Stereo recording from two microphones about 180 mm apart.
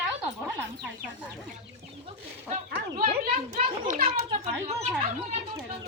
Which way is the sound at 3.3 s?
35° right (ahead or behind).